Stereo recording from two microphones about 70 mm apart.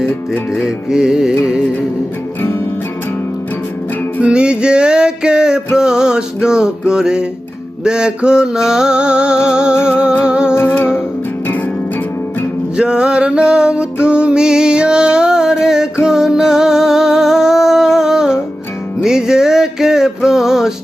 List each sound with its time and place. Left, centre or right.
0.5 s music: centre
4.2 s music: centre
10.5 s humming: left
12.7 s music: centre